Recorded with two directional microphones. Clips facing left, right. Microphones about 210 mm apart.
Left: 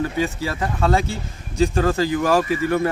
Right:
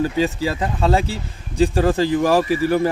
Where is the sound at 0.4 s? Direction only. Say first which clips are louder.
Right 2 dB; 15° right (ahead or behind).